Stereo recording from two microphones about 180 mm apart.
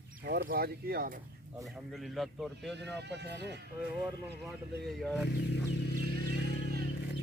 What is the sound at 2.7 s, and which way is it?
Speech, 70° right (ahead or behind).